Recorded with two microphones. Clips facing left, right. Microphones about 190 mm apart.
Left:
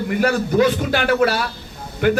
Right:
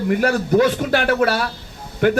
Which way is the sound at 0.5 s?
55° right (ahead or behind).